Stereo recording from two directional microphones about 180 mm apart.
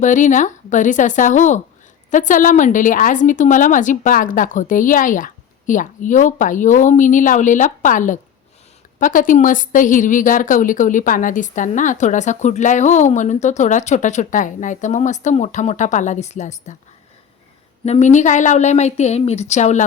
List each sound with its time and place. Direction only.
0.0 s a woman's voice: 45° left (ahead or behind)
17.8 s a woman's voice: 40° left (ahead or behind)